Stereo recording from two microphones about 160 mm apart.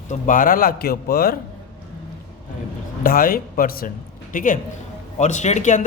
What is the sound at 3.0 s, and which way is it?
A man's voice, 65° left (ahead or behind).